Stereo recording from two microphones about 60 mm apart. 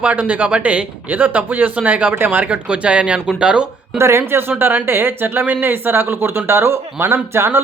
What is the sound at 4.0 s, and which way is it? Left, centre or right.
Speech, right.